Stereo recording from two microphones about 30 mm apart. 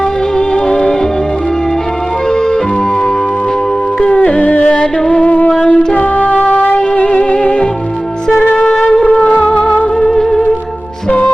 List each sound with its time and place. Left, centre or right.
0.3 s music: left
4.6 s music: left
6.7 s music: left
8.4 s music: left
9.3 s music: left
10.1 s music: centre